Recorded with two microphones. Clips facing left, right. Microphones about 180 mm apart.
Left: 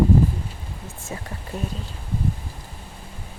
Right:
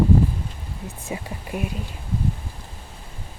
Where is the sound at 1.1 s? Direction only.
10° right (ahead or behind).